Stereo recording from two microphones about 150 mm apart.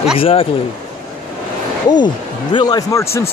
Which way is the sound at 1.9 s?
30° left (ahead or behind).